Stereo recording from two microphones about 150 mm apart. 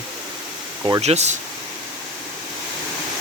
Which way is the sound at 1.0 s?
45° right (ahead or behind).